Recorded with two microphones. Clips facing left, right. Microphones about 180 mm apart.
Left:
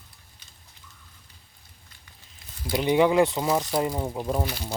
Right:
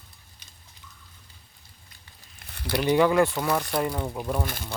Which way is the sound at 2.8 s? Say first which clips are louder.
Left 1 dB; 15° left (ahead or behind).